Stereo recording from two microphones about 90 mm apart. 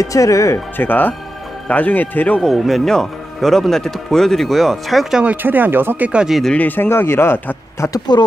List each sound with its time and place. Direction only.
0.0 s speech: 35° left (ahead or behind)
0.7 s speech: 20° left (ahead or behind)
2.4 s speech: centre (ahead or behind)
5.2 s speech: 20° right (ahead or behind)
6.2 s speech: centre (ahead or behind)
6.5 s speech: 20° left (ahead or behind)